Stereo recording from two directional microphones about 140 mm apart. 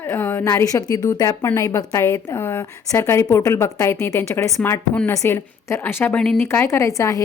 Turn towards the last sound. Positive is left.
turn(degrees=20)  # may be behind; listen again after turning